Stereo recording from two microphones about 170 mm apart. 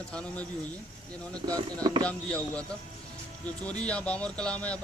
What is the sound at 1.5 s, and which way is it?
Speech, 20° right (ahead or behind).